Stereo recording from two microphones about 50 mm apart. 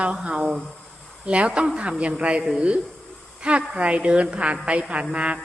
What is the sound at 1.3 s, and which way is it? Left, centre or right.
A woman's voice, right.